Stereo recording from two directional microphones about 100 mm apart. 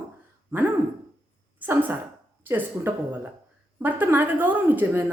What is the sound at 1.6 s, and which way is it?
A woman's voice, 15° right (ahead or behind).